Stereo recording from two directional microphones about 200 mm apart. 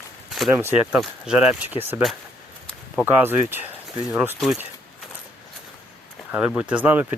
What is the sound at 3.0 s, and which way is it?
A man's voice, 10° right (ahead or behind).